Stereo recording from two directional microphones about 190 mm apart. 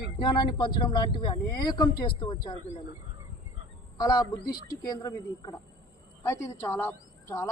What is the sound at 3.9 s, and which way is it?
A woman's voice, 20° left (ahead or behind).